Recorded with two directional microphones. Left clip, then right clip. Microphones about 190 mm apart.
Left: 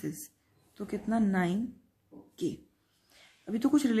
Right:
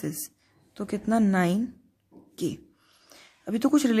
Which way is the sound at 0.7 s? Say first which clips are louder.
Right 6 dB; 50° right (ahead or behind).